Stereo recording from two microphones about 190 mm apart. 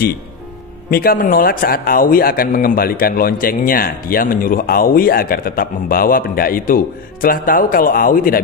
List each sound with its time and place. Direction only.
0.8 s speech: 50° left (ahead or behind)